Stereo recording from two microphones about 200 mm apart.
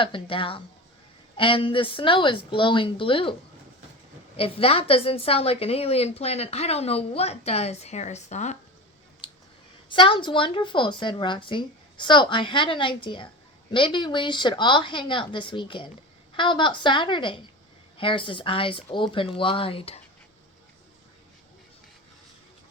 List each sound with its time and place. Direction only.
0.0 s a woman's voice: 25° left (ahead or behind)
4.4 s a woman's voice: 30° left (ahead or behind)
9.9 s a woman's voice: 25° left (ahead or behind)